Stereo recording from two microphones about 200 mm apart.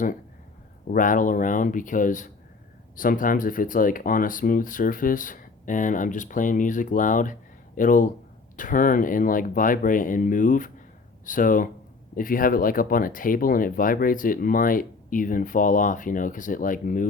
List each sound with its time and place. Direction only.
0.9 s speech: 40° left (ahead or behind)